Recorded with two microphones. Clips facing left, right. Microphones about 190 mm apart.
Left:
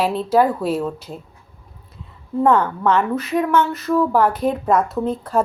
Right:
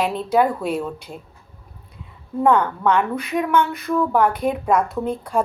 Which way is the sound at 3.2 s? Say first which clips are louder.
Left 2 dB; centre (ahead or behind).